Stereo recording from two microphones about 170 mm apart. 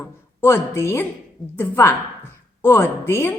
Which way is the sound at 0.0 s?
15° left (ahead or behind).